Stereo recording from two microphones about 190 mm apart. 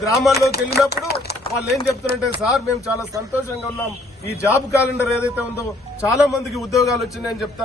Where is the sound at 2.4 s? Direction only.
Centre (ahead or behind).